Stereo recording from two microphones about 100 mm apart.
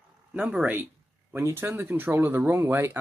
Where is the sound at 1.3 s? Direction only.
25° right (ahead or behind).